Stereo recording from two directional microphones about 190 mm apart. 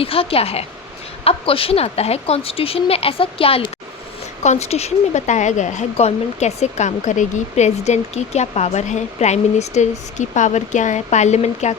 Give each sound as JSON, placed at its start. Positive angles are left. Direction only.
{"t": 0.0, "sound": "a woman's voice", "side_deg": 30}